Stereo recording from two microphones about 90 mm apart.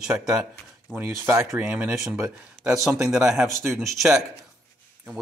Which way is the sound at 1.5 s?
10° right (ahead or behind).